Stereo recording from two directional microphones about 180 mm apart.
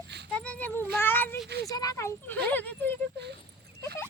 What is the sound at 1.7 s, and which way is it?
Speech, 20° left (ahead or behind).